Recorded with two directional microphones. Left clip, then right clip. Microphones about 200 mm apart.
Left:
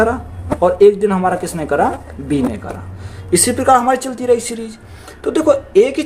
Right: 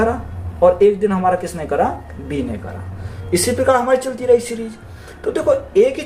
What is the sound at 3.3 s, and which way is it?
Speech, 45° left (ahead or behind).